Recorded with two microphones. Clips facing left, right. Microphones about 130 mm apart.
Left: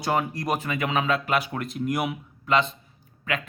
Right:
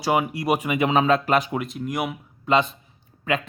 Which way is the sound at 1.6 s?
Centre (ahead or behind).